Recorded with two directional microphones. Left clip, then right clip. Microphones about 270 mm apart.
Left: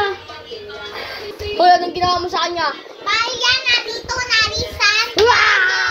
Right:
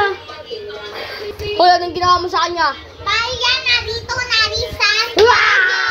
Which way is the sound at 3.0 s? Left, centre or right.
Left.